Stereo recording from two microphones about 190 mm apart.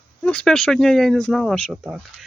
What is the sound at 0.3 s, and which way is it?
Speech, 5° left (ahead or behind).